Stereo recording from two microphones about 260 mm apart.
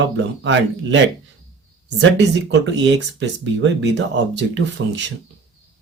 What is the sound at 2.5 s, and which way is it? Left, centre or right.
Speech, right.